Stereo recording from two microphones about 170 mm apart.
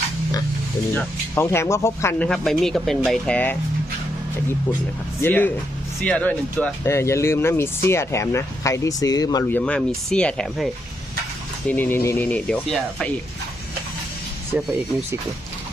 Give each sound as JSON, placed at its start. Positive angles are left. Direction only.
{"t": 0.9, "sound": "speech", "side_deg": 15}
{"t": 5.2, "sound": "speech", "side_deg": 10}
{"t": 9.5, "sound": "speech", "side_deg": 10}
{"t": 11.7, "sound": "speech", "side_deg": 10}